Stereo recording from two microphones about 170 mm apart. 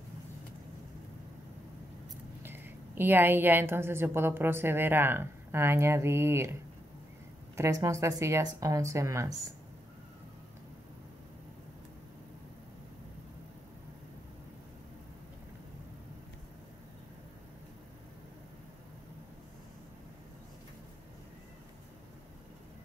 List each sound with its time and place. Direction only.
2.4 s a woman's voice: 10° right (ahead or behind)
7.5 s a woman's voice: 15° right (ahead or behind)